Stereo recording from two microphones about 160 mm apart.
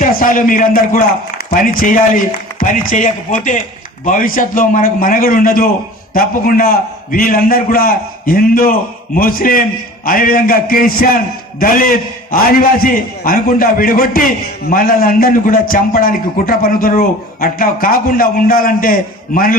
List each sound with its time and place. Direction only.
0.0 s a man's voice: 55° left (ahead or behind)